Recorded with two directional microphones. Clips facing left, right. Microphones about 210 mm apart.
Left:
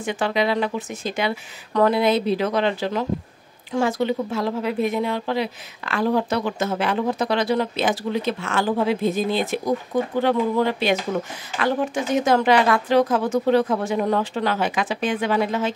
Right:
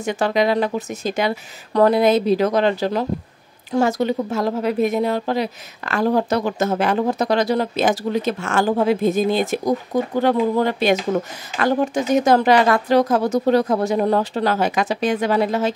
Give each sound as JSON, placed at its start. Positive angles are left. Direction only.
{"t": 0.0, "sound": "speech", "side_deg": -40}